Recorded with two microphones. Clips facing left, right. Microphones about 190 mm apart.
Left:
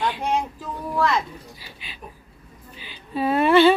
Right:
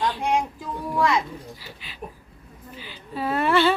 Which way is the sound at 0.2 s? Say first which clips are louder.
Right 1 dB; 10° right (ahead or behind).